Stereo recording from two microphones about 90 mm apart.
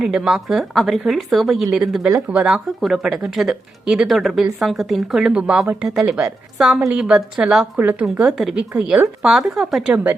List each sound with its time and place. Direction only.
0.0 s speech: 5° right (ahead or behind)
7.8 s speech: 20° right (ahead or behind)
8.2 s speech: 5° right (ahead or behind)